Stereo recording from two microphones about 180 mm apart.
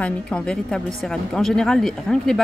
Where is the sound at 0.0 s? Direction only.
5° left (ahead or behind).